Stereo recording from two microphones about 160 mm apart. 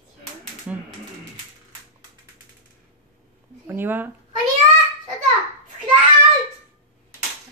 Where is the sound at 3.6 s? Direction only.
15° right (ahead or behind).